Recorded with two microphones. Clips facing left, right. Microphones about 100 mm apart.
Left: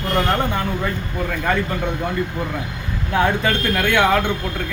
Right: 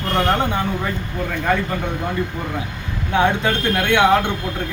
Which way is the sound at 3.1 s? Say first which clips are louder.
Right 1 dB; 20° right (ahead or behind).